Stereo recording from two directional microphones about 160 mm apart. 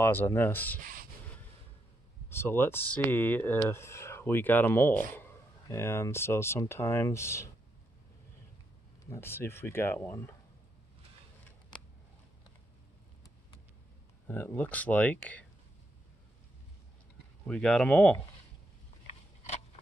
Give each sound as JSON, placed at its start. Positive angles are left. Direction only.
{"t": 0.0, "sound": "speech", "side_deg": 15}
{"t": 2.2, "sound": "speech", "side_deg": 15}
{"t": 9.0, "sound": "speech", "side_deg": 15}
{"t": 14.2, "sound": "speech", "side_deg": 15}
{"t": 17.5, "sound": "speech", "side_deg": 5}